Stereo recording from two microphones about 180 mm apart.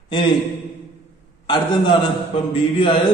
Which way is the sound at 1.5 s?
25° left (ahead or behind).